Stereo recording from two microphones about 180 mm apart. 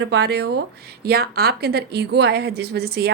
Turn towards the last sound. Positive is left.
turn(degrees=-60)  # may be behind; listen again after turning